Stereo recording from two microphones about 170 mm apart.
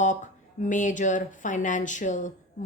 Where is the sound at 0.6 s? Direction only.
50° left (ahead or behind).